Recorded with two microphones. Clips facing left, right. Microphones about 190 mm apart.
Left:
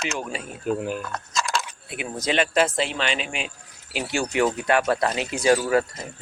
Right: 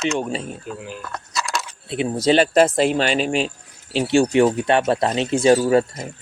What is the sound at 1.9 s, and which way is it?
Speech, 30° right (ahead or behind).